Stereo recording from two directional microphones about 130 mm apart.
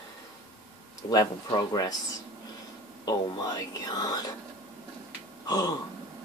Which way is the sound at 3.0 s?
30° left (ahead or behind).